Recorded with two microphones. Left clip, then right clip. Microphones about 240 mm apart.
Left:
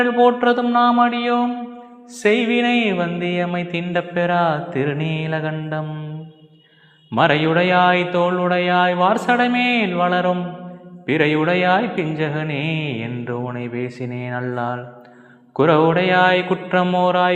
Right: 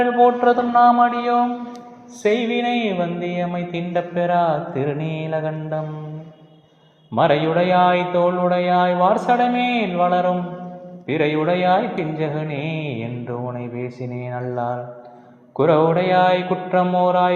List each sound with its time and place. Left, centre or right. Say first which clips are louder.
0.0 s mantra: even; left
7.1 s mantra: left 1 dB; left
13.2 s mantra: left 1 dB; left